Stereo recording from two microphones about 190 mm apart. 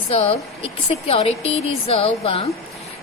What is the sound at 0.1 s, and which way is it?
Speech, 30° left (ahead or behind).